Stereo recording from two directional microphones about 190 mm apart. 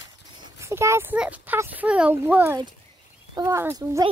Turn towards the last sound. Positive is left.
turn(degrees=-15)  # may be behind; listen again after turning